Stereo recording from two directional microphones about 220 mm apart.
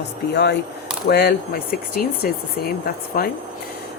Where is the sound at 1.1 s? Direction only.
45° left (ahead or behind).